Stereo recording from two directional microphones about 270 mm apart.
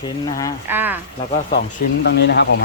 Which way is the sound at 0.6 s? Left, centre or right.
Centre.